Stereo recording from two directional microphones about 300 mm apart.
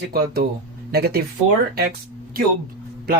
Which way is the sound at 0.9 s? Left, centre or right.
Right.